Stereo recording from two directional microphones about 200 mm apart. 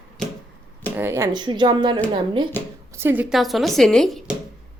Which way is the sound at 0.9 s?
10° right (ahead or behind).